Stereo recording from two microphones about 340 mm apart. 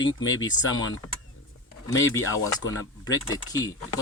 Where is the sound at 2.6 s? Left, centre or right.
Left.